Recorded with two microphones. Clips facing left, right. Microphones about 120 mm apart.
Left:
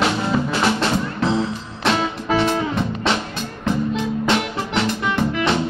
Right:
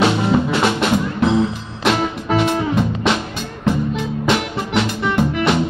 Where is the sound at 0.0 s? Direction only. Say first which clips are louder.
Right 4 dB; 20° right (ahead or behind).